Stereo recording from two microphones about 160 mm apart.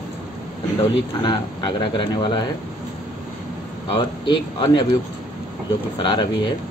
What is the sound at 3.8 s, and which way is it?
Speech, 30° left (ahead or behind).